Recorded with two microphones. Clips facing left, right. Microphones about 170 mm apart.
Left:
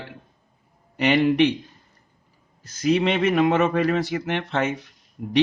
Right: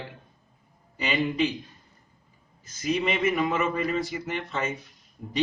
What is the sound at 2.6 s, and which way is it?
A man's voice, 75° left (ahead or behind).